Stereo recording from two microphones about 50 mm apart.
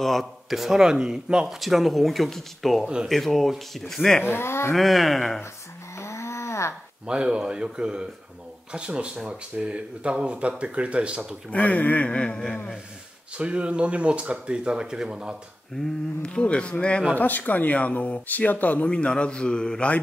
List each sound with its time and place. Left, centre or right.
0.0 s speech: centre
1.6 s speech: centre
4.2 s speech: left
4.7 s speech: centre
5.9 s a sound: left
7.1 s speech: centre
11.5 s a man's voice: left
13.4 s speech: right
15.8 s a man's voice: centre
17.1 s speech: left
18.9 s a man's voice: centre